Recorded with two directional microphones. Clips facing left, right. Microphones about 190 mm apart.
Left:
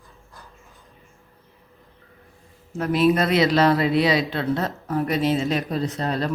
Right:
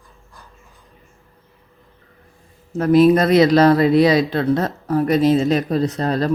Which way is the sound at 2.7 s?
40° right (ahead or behind).